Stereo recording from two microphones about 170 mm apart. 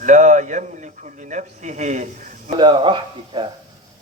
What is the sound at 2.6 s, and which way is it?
Speech, 30° right (ahead or behind).